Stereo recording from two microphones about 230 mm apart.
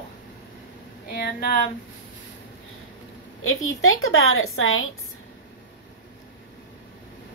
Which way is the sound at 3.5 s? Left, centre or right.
Left.